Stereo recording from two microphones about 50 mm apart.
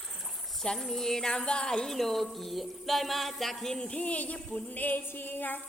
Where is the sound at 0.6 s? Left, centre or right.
Centre; by 5.6 s left.